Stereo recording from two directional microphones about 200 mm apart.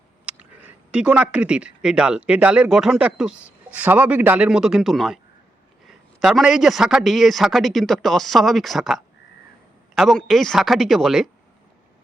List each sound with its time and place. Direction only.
0.3 s speech: 5° right (ahead or behind)